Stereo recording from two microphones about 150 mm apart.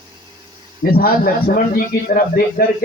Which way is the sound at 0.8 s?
80° left.